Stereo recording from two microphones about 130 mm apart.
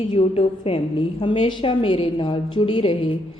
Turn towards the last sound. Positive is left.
turn(degrees=45)  # may be behind; listen again after turning